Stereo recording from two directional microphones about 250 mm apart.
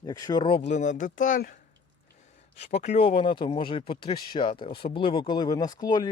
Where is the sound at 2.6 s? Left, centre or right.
Left.